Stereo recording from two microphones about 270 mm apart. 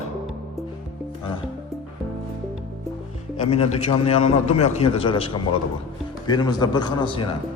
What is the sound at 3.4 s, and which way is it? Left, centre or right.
A man's voice, left.